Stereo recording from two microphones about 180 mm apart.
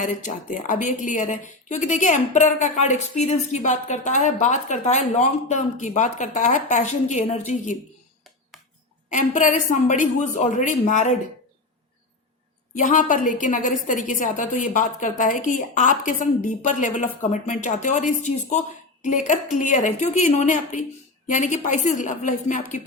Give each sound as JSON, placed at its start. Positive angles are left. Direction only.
{"t": 0.0, "sound": "a woman's voice", "side_deg": 45}
{"t": 9.1, "sound": "a woman's voice", "side_deg": 45}
{"t": 12.7, "sound": "a woman's voice", "side_deg": 45}